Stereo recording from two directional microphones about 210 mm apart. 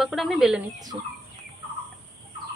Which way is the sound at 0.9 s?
25° right (ahead or behind).